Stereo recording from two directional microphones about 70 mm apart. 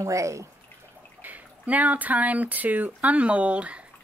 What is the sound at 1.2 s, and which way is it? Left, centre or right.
Speech, right.